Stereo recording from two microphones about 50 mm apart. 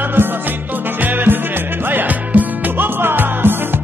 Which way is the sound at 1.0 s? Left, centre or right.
Right.